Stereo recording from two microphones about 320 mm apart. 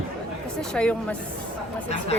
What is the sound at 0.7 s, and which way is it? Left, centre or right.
Speech, centre.